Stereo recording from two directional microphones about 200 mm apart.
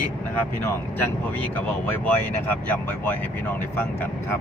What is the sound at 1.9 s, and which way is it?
Speech, 10° left (ahead or behind).